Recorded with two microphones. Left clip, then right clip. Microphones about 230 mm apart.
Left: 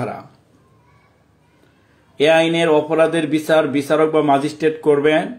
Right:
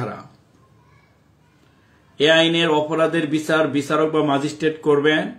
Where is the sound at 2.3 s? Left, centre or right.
Centre.